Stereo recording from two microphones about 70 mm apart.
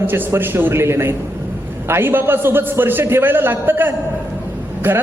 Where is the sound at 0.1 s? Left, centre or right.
Right.